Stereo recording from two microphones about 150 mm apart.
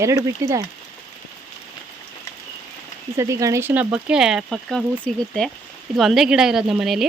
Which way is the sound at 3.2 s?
20° right (ahead or behind).